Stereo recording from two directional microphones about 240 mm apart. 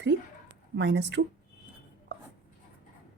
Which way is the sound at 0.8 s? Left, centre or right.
Right.